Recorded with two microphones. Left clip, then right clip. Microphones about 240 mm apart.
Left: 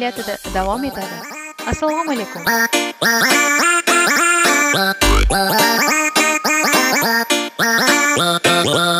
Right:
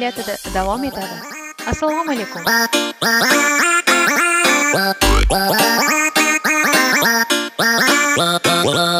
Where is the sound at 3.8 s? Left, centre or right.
Left.